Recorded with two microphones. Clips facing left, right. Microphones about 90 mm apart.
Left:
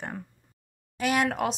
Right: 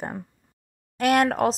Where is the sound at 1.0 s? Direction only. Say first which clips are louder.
Right 6 dB; 55° right (ahead or behind).